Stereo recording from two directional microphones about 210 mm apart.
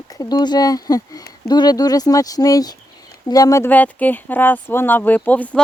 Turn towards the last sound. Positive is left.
turn(degrees=5)  # may be behind; listen again after turning